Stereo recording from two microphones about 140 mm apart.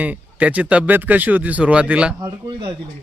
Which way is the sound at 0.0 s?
10° right (ahead or behind).